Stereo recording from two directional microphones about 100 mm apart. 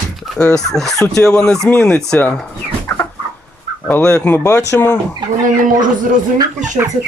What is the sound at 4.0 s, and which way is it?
Speech, 30° left (ahead or behind).